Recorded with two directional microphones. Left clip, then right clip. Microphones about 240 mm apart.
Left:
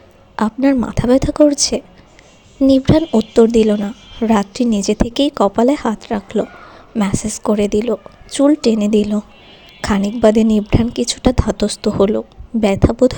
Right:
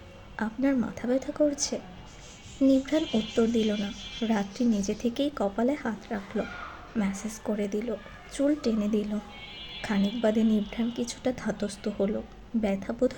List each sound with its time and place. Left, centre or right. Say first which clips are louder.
0.3 s a woman's voice: left 13 dB; left